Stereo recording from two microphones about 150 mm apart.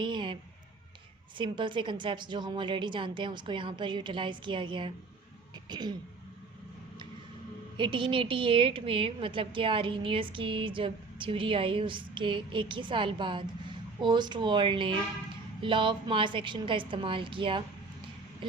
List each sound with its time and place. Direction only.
0.0 s a sound: 30° right (ahead or behind)
1.4 s a woman's voice: 30° right (ahead or behind)
7.8 s a woman's voice: 35° right (ahead or behind)